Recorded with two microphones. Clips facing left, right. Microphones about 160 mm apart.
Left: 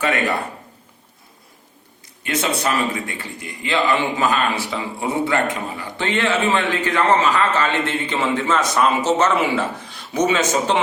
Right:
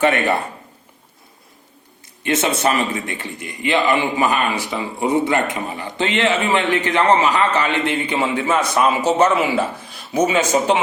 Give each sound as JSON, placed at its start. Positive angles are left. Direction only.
{"t": 0.0, "sound": "speech", "side_deg": -25}
{"t": 2.2, "sound": "speech", "side_deg": -25}